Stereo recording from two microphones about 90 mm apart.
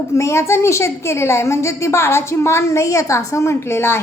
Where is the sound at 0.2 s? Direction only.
30° left (ahead or behind).